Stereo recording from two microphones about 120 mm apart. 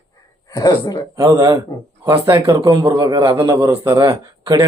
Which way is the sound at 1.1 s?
25° right (ahead or behind).